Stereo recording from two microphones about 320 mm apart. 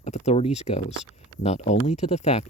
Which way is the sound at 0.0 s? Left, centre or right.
Left.